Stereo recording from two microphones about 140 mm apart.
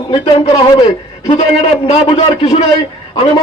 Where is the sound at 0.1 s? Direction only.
40° left (ahead or behind).